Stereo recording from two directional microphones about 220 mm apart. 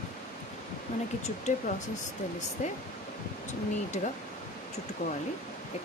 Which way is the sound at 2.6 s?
35° left (ahead or behind).